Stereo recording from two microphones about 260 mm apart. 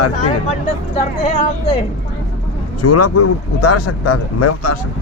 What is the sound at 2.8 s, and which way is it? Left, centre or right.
Speech, left.